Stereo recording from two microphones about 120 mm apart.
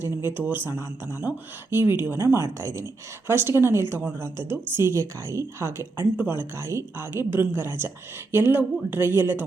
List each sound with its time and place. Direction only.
0.0 s a woman's voice: 20° right (ahead or behind)